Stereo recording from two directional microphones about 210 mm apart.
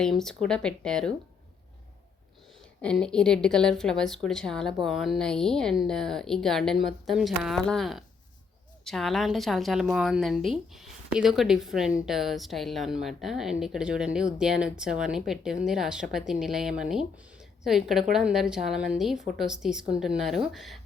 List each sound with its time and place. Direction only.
0.0 s a woman's voice: centre (ahead or behind)
2.8 s a woman's voice: 5° left (ahead or behind)